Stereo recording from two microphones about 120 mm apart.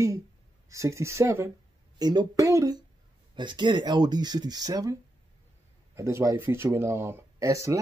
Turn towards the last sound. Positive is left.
turn(degrees=-25)  # may be behind; listen again after turning